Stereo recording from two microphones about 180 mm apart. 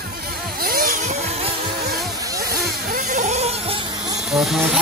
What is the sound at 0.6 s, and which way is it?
Vehicle, 55° right (ahead or behind).